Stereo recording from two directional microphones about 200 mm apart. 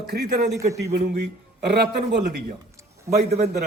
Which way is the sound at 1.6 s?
55° right (ahead or behind).